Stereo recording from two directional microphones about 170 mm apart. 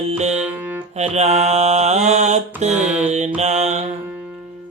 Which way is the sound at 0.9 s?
40° right (ahead or behind).